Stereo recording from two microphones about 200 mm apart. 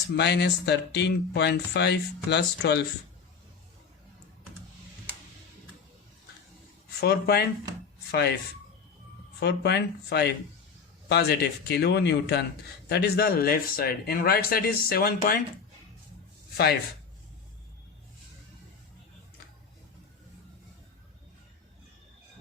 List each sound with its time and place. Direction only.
0.1 s speech: 60° left (ahead or behind)
7.0 s speech: 50° left (ahead or behind)
9.4 s speech: 55° left (ahead or behind)